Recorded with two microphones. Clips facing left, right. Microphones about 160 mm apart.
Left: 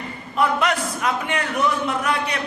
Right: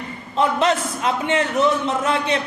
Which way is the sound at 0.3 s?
25° right (ahead or behind).